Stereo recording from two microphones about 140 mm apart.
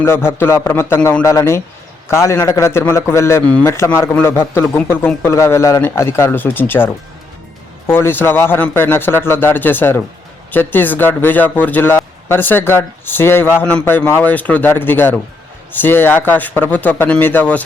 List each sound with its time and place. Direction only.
0.0 s a man's voice: 15° left (ahead or behind)